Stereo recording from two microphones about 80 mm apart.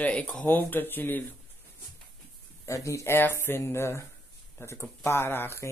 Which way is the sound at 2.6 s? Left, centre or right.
Left.